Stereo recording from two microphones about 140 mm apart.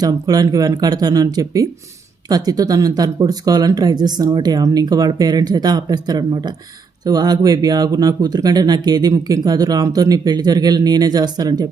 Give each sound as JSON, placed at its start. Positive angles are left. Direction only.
{"t": 0.0, "sound": "speech", "side_deg": -25}